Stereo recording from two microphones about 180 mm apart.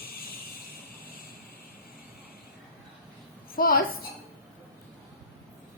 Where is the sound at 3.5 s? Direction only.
55° left (ahead or behind).